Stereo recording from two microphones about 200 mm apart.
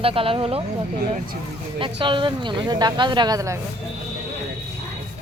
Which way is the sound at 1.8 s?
25° right (ahead or behind).